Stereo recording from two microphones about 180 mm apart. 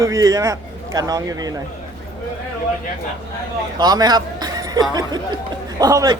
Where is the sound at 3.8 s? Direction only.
20° right (ahead or behind).